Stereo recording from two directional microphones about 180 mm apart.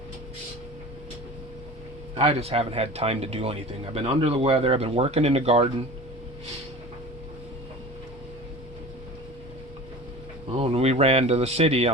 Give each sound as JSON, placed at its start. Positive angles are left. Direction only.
{"t": 2.1, "sound": "speech", "side_deg": -35}
{"t": 10.6, "sound": "speech", "side_deg": -35}